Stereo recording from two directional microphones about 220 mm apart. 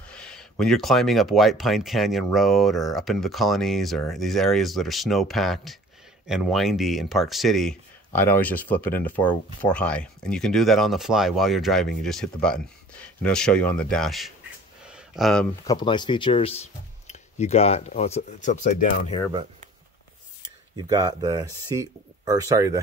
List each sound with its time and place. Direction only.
0.1 s speech: 5° left (ahead or behind)
14.9 s a sound: centre (ahead or behind)
15.6 s speech: 20° left (ahead or behind); by 19.1 s 35° left (ahead or behind)
20.7 s speech: 20° right (ahead or behind)